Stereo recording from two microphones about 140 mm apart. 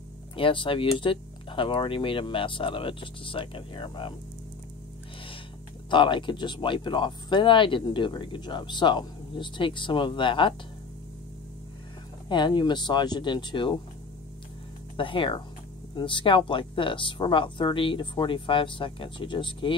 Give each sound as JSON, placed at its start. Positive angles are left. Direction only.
{"t": 0.4, "sound": "speech", "side_deg": 40}
{"t": 5.9, "sound": "speech", "side_deg": 35}
{"t": 12.3, "sound": "speech", "side_deg": 35}
{"t": 15.0, "sound": "speech", "side_deg": 40}